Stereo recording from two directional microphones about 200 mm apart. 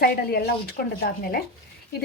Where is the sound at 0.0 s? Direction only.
50° left (ahead or behind).